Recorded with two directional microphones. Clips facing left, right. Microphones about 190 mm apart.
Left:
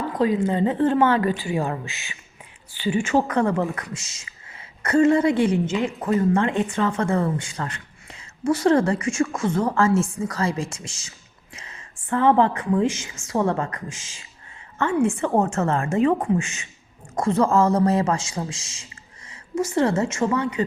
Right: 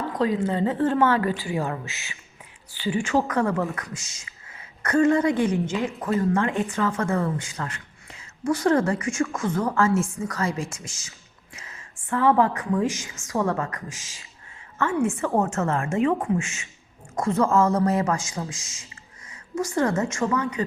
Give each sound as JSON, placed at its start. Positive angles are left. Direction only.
{"t": 0.2, "sound": "a woman's voice", "side_deg": 10}
{"t": 14.8, "sound": "a woman's voice", "side_deg": 30}